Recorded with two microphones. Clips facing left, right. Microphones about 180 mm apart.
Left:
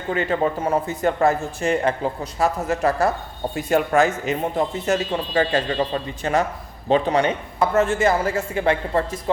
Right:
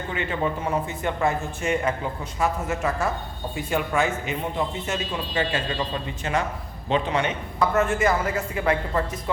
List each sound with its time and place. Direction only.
0.1 s a man's voice: 40° left (ahead or behind)
7.8 s speech: 30° left (ahead or behind)